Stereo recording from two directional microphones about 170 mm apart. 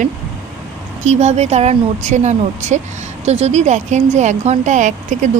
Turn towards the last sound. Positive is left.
turn(degrees=-45)  # may be behind; listen again after turning